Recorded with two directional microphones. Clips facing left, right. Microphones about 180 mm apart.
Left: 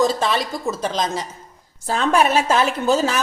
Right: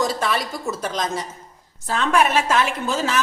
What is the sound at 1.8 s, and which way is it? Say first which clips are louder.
A woman's voice: left 2 dB; 35° left (ahead or behind).